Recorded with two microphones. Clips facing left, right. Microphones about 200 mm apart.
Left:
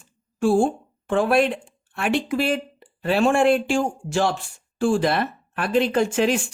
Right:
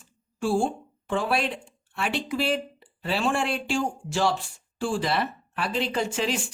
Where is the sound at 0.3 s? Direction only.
50° left (ahead or behind).